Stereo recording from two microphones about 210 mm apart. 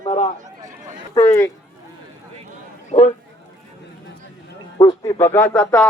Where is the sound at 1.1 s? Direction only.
15° left (ahead or behind).